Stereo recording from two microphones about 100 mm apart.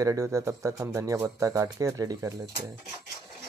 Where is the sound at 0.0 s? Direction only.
30° right (ahead or behind).